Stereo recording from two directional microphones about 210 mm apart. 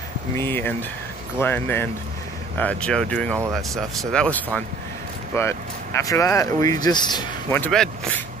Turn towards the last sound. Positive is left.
turn(degrees=5)  # may be behind; listen again after turning